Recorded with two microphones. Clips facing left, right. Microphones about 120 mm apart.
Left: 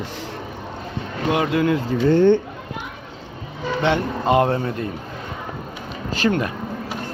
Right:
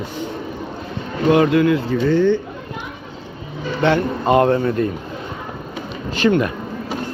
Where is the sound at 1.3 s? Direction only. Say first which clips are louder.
Right 6 dB; 15° left (ahead or behind).